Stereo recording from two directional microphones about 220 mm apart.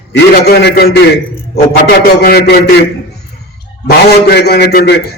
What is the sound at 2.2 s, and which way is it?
Speech, 45° left (ahead or behind).